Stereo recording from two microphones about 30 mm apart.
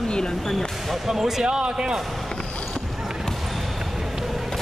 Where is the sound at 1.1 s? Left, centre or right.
Centre.